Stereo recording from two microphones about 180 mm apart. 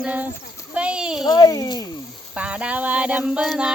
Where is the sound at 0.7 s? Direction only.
5° right (ahead or behind).